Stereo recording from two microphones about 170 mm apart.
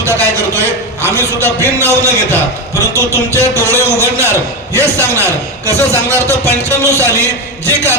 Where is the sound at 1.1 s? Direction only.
15° right (ahead or behind).